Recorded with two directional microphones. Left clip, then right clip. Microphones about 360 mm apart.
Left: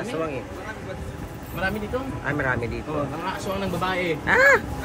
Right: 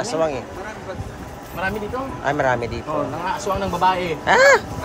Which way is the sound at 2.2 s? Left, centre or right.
Centre.